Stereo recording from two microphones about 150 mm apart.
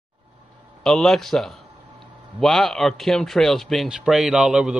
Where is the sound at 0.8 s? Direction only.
5° left (ahead or behind).